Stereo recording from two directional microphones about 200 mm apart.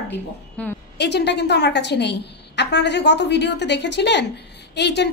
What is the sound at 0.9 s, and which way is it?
A woman's voice, 60° left (ahead or behind).